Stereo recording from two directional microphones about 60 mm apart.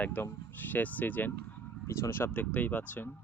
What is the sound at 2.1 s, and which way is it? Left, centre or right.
Speech, left.